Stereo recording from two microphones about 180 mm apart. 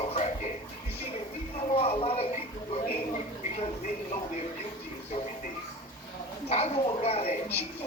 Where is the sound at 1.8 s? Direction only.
35° left (ahead or behind).